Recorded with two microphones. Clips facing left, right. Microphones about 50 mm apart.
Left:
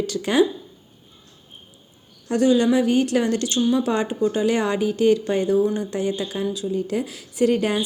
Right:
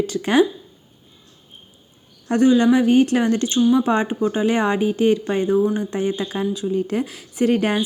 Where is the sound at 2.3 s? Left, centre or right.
Right.